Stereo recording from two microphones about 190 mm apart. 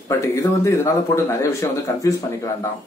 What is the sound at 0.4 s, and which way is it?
A man's voice, 15° left (ahead or behind).